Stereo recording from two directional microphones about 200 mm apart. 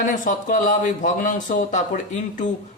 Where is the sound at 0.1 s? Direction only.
40° left (ahead or behind).